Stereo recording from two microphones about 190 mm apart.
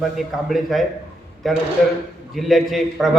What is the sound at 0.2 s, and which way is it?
Speech, centre (ahead or behind).